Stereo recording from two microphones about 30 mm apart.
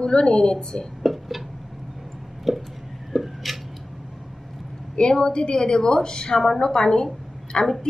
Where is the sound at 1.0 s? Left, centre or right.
Centre.